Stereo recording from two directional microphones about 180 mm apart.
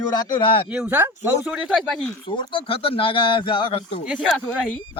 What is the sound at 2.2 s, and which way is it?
Speech, 25° left (ahead or behind).